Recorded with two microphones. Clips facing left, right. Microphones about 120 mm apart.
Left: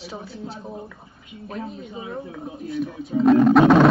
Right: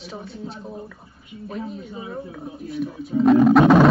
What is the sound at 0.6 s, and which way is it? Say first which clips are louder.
Speech: even; 15° left (ahead or behind).